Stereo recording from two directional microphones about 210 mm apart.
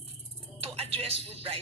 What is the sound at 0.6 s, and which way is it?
Speech, 30° right (ahead or behind).